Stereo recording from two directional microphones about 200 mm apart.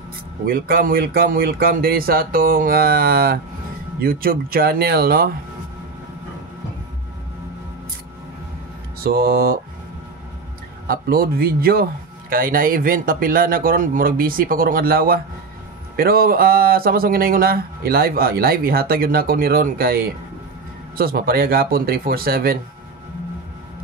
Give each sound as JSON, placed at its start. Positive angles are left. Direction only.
{"t": 0.5, "sound": "speech", "side_deg": -50}
{"t": 9.0, "sound": "speech", "side_deg": -50}
{"t": 10.9, "sound": "speech", "side_deg": -50}